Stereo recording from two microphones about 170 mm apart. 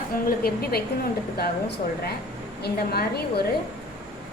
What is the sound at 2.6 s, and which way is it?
Speech, 65° left (ahead or behind).